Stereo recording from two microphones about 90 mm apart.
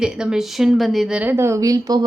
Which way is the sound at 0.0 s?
5° right (ahead or behind).